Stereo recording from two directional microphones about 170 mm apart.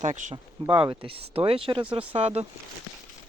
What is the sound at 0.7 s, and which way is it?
Speech, 30° right (ahead or behind).